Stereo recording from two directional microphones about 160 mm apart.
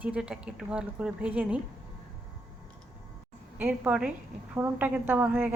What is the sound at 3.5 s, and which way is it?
A woman's voice, 10° right (ahead or behind).